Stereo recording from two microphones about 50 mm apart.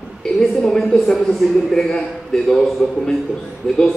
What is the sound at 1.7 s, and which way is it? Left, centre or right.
A man's voice, centre.